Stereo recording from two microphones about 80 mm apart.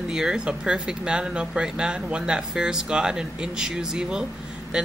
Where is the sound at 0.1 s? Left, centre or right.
Centre.